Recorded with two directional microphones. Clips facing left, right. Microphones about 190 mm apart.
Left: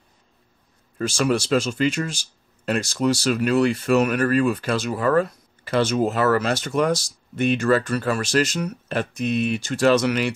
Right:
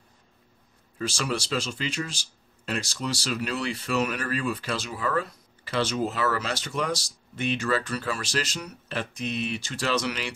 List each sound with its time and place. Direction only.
0.9 s speech: 50° left (ahead or behind)